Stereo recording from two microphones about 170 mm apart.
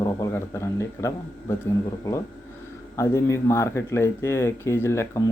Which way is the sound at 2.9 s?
15° left (ahead or behind).